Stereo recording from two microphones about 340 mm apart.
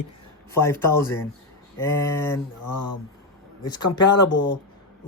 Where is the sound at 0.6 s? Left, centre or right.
Centre.